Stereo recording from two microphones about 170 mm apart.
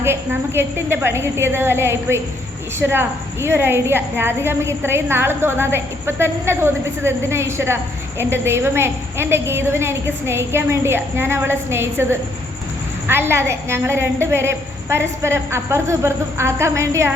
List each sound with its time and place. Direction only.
0.0 s a woman's voice: 15° right (ahead or behind)
13.1 s a woman's voice: 15° right (ahead or behind)